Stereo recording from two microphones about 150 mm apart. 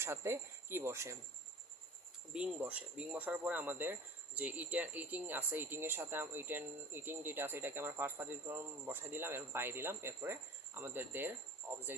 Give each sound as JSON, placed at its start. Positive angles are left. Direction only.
{"t": 0.0, "sound": "speech", "side_deg": -15}
{"t": 2.3, "sound": "speech", "side_deg": -5}